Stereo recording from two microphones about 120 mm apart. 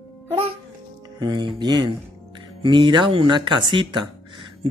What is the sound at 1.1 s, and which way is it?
Speech, 35° right (ahead or behind).